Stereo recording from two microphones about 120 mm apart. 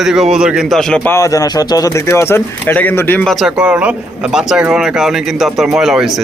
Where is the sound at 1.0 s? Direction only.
20° left (ahead or behind).